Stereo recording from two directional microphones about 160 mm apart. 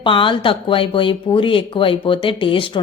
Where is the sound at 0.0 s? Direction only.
30° left (ahead or behind).